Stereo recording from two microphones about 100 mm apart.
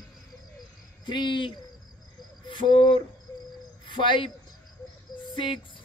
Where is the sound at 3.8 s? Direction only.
55° left (ahead or behind).